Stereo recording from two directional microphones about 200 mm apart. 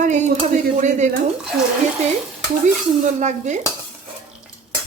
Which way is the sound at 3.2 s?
35° right (ahead or behind).